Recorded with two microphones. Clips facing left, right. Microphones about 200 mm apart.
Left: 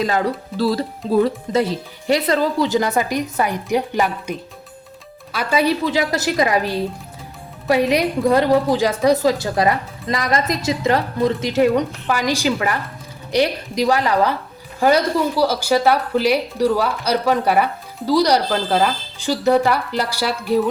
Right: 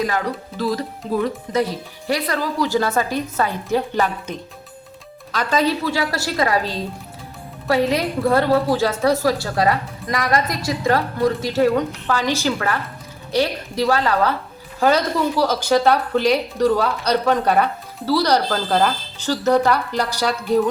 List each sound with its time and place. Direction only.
0.0 s speech: 30° left (ahead or behind); by 20.7 s 5° left (ahead or behind)